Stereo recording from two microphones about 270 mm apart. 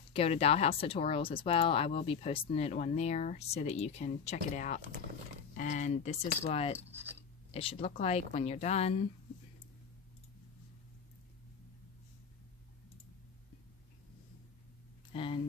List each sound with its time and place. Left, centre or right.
0.1 s speech: left
15.1 s speech: centre